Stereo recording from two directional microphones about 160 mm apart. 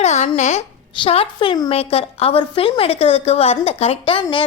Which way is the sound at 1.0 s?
35° left (ahead or behind).